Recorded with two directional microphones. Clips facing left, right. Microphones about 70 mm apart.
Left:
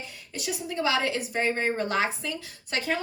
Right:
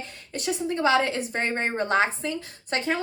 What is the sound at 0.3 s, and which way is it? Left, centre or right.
Speech, right.